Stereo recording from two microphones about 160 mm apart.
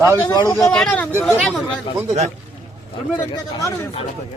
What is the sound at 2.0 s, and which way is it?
Speech, 45° right (ahead or behind).